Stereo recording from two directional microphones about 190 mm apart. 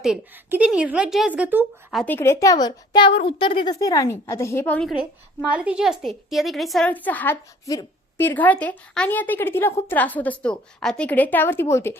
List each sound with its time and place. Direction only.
0.0 s speech: 5° right (ahead or behind)
2.1 s a woman's voice: 15° left (ahead or behind)